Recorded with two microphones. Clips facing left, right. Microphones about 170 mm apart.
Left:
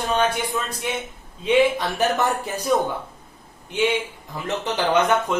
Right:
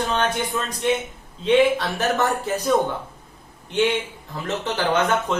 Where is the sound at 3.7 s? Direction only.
10° left (ahead or behind).